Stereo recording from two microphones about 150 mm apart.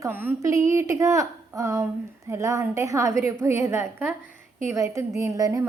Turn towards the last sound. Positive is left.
turn(degrees=-20)  # may be behind; listen again after turning